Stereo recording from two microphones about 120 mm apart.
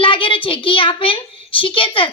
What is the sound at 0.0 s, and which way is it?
A child's voice, 45° left (ahead or behind).